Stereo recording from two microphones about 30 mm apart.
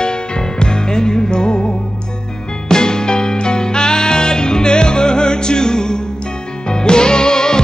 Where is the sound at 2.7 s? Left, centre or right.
Left.